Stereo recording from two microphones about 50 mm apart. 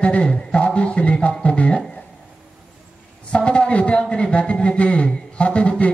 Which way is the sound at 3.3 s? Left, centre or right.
Left.